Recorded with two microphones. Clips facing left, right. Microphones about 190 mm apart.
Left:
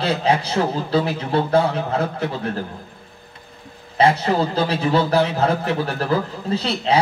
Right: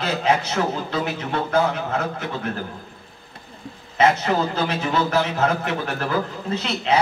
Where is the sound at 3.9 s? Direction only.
35° left (ahead or behind).